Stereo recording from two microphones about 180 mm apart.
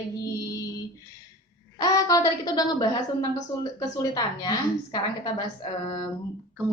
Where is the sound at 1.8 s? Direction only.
20° left (ahead or behind).